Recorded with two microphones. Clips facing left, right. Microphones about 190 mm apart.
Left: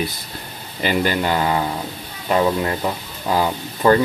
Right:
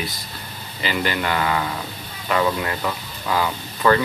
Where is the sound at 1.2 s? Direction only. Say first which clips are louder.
Left 3 dB; 30° left (ahead or behind).